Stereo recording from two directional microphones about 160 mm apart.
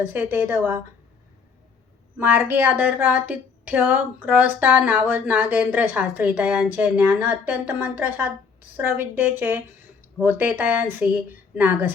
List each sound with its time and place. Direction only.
0.0 s a woman's voice: 10° right (ahead or behind)
2.1 s a woman's voice: 10° right (ahead or behind)